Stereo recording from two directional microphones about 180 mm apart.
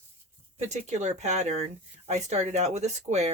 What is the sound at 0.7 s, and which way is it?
Speech, 40° right (ahead or behind).